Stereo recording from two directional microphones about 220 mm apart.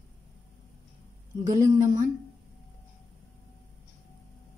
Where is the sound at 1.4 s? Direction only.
15° right (ahead or behind).